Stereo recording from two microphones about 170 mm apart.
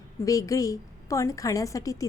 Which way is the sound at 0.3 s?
20° left (ahead or behind).